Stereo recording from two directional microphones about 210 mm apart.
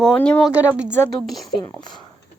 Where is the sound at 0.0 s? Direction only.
5° left (ahead or behind).